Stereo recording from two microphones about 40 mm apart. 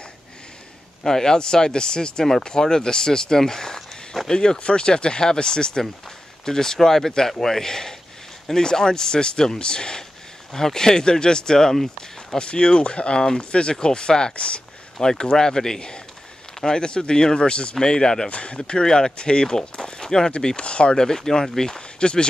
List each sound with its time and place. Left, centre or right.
1.0 s speech: centre
12.4 s speech: left
15.0 s speech: centre
19.8 s a sound: centre
20.3 s speech: left